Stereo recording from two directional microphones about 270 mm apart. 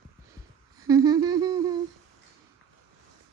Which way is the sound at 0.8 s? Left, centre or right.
Centre.